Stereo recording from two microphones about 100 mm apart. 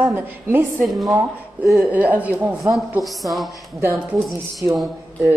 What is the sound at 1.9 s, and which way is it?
Speech, 15° right (ahead or behind).